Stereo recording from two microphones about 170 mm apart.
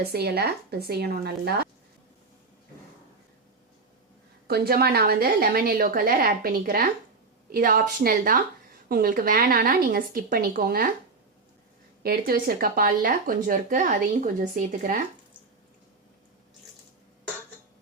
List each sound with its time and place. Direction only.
0.1 s a woman's voice: 70° right (ahead or behind)
4.4 s speech: 65° right (ahead or behind)
12.0 s speech: 60° right (ahead or behind)